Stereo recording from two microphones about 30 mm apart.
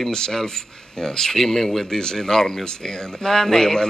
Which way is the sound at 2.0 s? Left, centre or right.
Left.